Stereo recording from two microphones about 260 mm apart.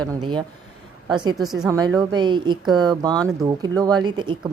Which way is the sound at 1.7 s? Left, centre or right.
Centre.